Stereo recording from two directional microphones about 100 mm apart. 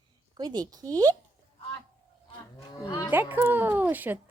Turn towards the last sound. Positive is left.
turn(degrees=-20)  # may be behind; listen again after turning